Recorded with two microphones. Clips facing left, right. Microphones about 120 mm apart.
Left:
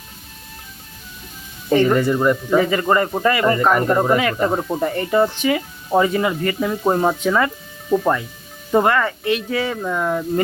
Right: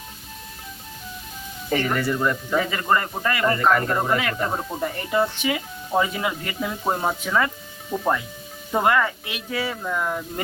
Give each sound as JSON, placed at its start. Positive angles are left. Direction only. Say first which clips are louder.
{"t": 1.7, "sound": "speech", "louder": "left 8 dB", "side_deg": 25}
{"t": 2.6, "sound": "speech", "louder": "left 3 dB", "side_deg": 5}
{"t": 4.2, "sound": "speech", "louder": "left 6 dB", "side_deg": 5}
{"t": 4.7, "sound": "speech", "louder": "left 6 dB", "side_deg": 25}
{"t": 5.4, "sound": "speech", "louder": "left 6 dB", "side_deg": -5}
{"t": 9.8, "sound": "speech", "louder": "left 5 dB", "side_deg": 10}